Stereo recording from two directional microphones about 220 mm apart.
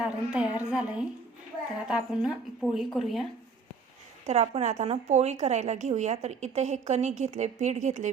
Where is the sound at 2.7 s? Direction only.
Centre (ahead or behind).